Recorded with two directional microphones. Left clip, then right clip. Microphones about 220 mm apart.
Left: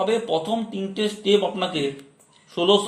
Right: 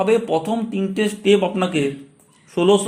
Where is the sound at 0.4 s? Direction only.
10° right (ahead or behind).